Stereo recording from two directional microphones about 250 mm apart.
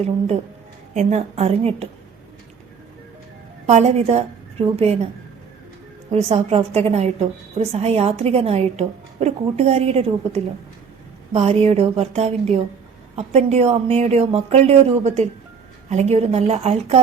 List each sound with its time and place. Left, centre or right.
0.9 s a woman's voice: right
3.7 s a woman's voice: right
6.1 s a woman's voice: right